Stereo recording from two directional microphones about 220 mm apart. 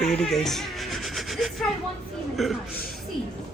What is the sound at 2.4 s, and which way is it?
Speech, centre (ahead or behind).